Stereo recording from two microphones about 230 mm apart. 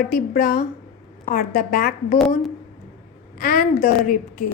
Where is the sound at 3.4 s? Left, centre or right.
Left.